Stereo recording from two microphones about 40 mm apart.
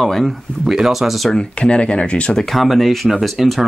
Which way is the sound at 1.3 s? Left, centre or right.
Left.